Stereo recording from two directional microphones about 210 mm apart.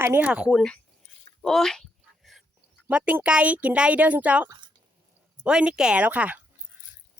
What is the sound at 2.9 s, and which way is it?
Speech, 5° right (ahead or behind).